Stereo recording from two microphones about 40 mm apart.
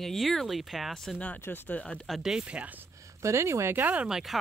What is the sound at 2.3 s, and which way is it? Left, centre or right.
Speech, right.